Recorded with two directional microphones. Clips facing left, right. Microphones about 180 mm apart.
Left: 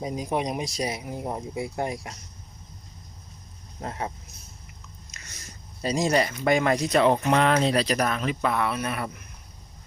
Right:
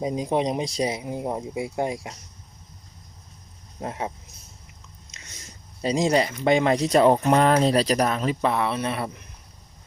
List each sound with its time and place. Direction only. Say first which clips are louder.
0.0 s speech: right 4 dB; 20° right (ahead or behind)
3.8 s speech: right 2 dB; 15° right (ahead or behind)
5.1 s a sound: right 2 dB; 20° right (ahead or behind)
5.8 s speech: right 2 dB; 20° right (ahead or behind)
6.9 s speech: right 3 dB; 40° right (ahead or behind)